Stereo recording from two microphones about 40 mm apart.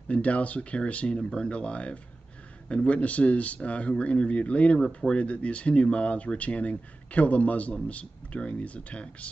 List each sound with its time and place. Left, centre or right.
0.1 s speech: left